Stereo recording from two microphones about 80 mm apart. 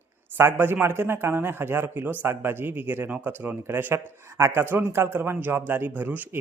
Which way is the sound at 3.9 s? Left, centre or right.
Right.